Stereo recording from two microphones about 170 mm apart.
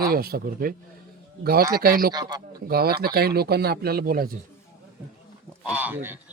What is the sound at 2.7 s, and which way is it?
Speech, 65° right (ahead or behind).